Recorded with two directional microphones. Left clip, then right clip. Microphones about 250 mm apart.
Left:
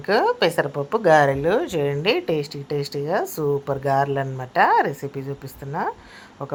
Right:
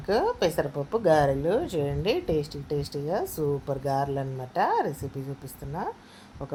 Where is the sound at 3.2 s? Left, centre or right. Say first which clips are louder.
Left 6 dB; left.